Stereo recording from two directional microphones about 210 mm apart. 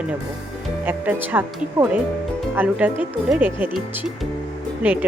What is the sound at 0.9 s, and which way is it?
Speech, 10° right (ahead or behind).